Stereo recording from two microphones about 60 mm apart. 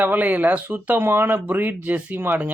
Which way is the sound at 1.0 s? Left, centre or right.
Right.